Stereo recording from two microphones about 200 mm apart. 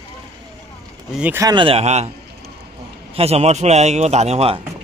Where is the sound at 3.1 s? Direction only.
30° right (ahead or behind).